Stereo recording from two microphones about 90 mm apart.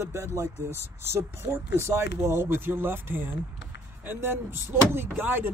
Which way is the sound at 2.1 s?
30° right (ahead or behind).